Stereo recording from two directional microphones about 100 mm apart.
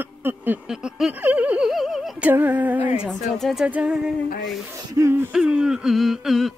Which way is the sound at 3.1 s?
5° left (ahead or behind).